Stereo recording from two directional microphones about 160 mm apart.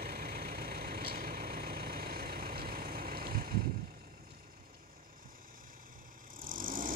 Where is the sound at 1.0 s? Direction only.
65° right (ahead or behind).